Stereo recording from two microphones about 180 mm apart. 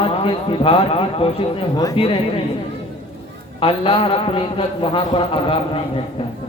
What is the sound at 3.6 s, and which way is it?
A man's voice, 30° left (ahead or behind).